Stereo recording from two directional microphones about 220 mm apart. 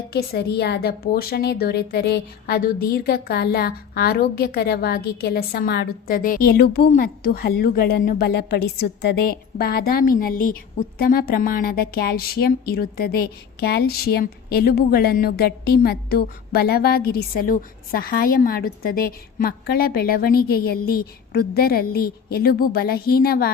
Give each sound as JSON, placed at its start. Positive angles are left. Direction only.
{"t": 0.1, "sound": "speech", "side_deg": 45}